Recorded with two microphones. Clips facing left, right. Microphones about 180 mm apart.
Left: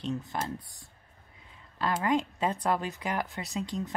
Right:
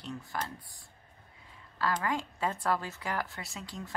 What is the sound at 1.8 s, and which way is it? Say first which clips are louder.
Speech: left 4 dB; 25° left (ahead or behind).